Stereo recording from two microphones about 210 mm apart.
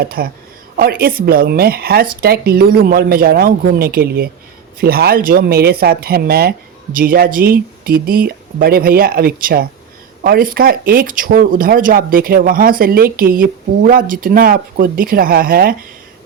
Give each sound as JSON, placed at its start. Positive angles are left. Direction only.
{"t": 0.0, "sound": "a woman's voice", "side_deg": -45}